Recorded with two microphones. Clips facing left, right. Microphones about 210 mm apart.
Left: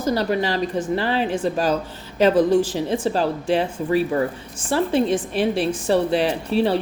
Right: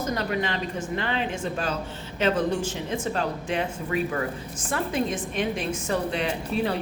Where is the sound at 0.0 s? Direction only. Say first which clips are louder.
Left 6 dB; 35° left (ahead or behind).